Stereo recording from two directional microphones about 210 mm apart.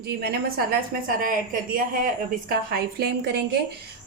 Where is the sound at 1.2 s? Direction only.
40° right (ahead or behind).